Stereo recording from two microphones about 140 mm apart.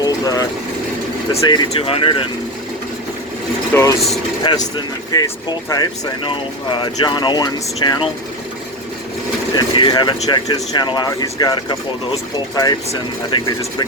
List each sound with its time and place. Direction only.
0.0 s vehicle: 25° left (ahead or behind)
1.4 s speech: 30° left (ahead or behind)
1.7 s speech: 45° left (ahead or behind)
3.7 s speech: 15° left (ahead or behind)
5.1 s speech: 25° left (ahead or behind)
9.6 s speech: 35° left (ahead or behind)